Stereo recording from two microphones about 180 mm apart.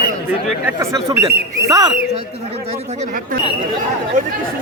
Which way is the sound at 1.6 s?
20° right (ahead or behind).